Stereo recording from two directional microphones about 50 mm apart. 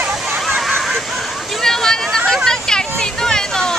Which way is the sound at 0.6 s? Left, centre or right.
Centre.